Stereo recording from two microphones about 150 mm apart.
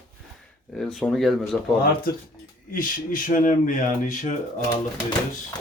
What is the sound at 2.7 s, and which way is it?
Speech, 65° left (ahead or behind).